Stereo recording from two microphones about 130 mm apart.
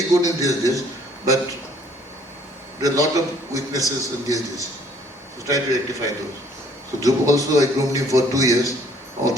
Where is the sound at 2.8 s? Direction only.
25° right (ahead or behind).